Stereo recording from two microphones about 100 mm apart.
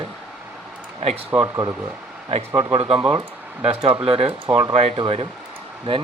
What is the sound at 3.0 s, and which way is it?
Speech, 45° right (ahead or behind).